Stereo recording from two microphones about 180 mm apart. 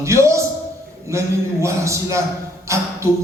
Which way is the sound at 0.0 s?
15° right (ahead or behind).